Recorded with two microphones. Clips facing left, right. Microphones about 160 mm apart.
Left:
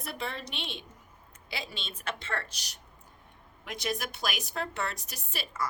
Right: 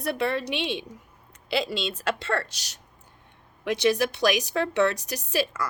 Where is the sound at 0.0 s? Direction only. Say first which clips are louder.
Right 11 dB; 65° right (ahead or behind).